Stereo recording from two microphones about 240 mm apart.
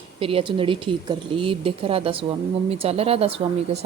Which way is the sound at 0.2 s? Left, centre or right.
Right.